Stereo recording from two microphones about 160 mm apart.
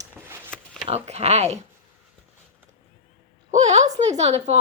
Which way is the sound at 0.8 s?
40° right (ahead or behind).